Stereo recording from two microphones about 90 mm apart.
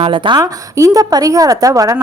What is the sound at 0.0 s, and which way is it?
Speech, 65° right (ahead or behind).